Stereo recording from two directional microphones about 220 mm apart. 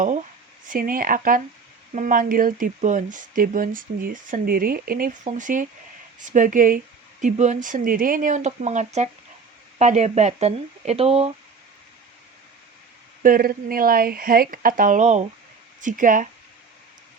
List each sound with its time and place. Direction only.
0.7 s speech: 40° right (ahead or behind)
13.2 s speech: 40° right (ahead or behind)